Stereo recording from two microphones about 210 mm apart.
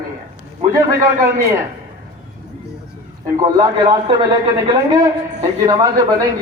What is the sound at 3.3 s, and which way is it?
A man's voice, 15° right (ahead or behind).